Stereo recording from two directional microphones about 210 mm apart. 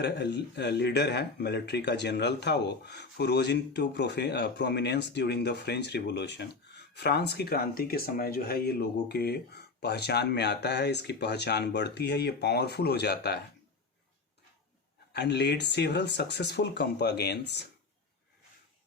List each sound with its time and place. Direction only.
0.0 s speech: 55° left (ahead or behind)
15.1 s speech: 55° left (ahead or behind)